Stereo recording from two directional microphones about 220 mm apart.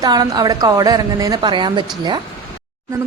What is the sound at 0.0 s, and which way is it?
A woman's voice, 15° right (ahead or behind).